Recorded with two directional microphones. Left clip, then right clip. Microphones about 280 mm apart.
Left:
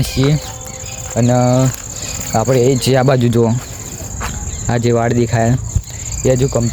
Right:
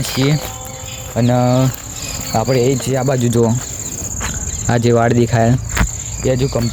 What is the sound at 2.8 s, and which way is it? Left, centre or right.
Speech, left.